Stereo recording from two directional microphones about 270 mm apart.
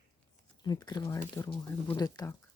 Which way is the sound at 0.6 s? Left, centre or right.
Centre.